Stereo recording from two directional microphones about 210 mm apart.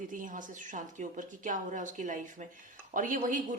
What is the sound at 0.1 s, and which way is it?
A woman's voice, 40° right (ahead or behind).